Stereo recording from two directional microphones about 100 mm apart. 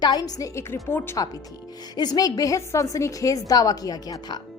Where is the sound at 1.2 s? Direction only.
40° left (ahead or behind).